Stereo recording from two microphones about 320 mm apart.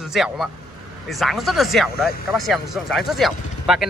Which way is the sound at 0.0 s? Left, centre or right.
Centre.